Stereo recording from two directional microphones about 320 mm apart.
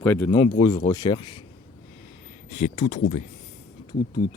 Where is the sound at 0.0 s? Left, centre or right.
Centre.